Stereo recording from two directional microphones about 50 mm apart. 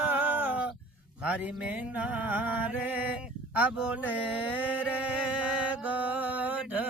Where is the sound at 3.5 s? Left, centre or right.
Right.